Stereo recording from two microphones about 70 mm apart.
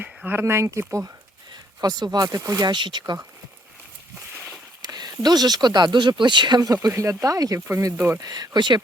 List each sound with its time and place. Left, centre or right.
0.3 s speech: right
1.8 s speech: right
4.8 s speech: right
6.8 s speech: right
7.9 s speech: right
8.2 s speech: right